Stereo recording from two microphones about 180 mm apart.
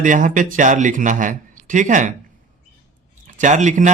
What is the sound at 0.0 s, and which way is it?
Speech, 45° right (ahead or behind).